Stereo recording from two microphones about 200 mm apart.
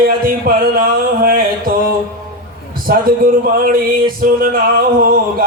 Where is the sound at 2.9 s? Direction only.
45° right (ahead or behind).